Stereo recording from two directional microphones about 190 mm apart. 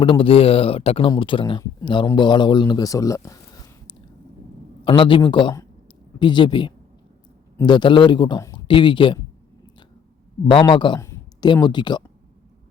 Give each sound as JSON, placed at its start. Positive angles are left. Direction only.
{"t": 0.0, "sound": "speech", "side_deg": 30}
{"t": 10.4, "sound": "speech", "side_deg": 25}